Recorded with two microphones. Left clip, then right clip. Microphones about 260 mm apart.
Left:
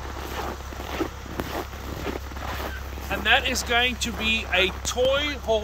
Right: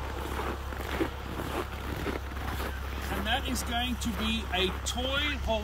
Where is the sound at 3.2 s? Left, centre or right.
Centre.